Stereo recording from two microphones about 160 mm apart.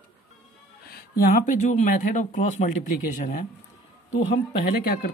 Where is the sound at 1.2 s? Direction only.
50° left (ahead or behind).